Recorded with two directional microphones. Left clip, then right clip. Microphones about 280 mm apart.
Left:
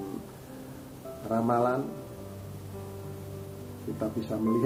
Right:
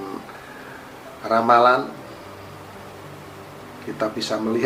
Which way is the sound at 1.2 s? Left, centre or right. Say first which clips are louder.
Right 12 dB; centre.